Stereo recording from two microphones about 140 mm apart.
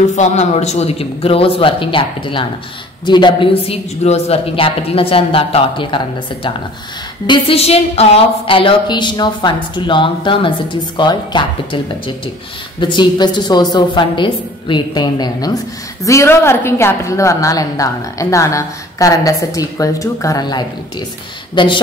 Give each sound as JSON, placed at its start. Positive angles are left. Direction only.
{"t": 0.1, "sound": "a man's voice", "side_deg": 55}
{"t": 12.8, "sound": "a woman's voice", "side_deg": 35}